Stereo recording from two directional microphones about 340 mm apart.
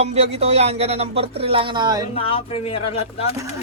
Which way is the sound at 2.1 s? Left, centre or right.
Centre.